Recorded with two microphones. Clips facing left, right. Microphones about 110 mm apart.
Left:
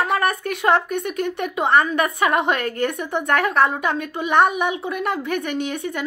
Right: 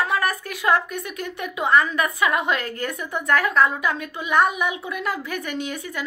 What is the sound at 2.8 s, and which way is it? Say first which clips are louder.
Speech: left 5 dB; 25° left (ahead or behind).